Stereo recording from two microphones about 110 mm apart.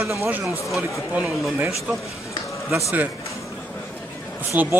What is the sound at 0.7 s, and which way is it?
Speech, centre (ahead or behind).